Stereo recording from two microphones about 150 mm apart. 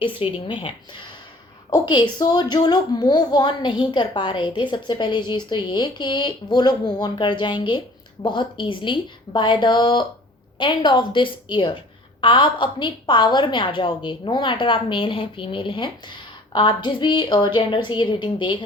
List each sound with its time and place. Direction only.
0.0 s a woman's voice: 35° left (ahead or behind)